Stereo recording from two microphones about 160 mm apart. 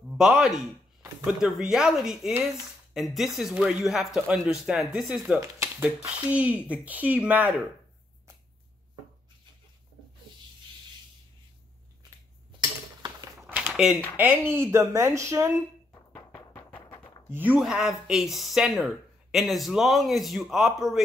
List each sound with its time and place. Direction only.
0.1 s speech: 5° right (ahead or behind)
12.5 s dishes: 25° right (ahead or behind)
13.5 s a sound: 5° right (ahead or behind)
14.1 s speech: 10° right (ahead or behind)
16.2 s a sound: 15° left (ahead or behind)
17.3 s speech: 10° right (ahead or behind)